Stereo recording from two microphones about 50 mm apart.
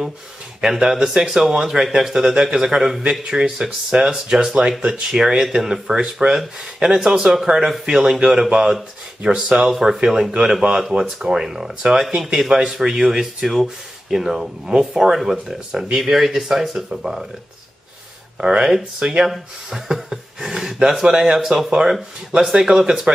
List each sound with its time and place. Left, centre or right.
0.7 s speech: centre
18.4 s speech: centre
19.2 s speech: centre